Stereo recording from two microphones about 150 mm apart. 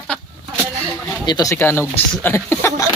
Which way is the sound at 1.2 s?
25° left (ahead or behind).